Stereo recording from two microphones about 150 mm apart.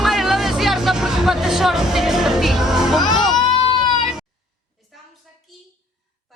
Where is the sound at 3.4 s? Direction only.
35° left (ahead or behind).